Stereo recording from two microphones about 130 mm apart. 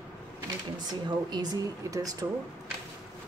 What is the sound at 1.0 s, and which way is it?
Speech, 30° right (ahead or behind).